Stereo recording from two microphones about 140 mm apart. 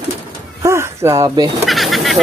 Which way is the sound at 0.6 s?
20° right (ahead or behind).